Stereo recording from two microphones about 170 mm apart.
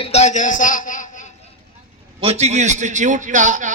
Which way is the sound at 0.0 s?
40° left (ahead or behind).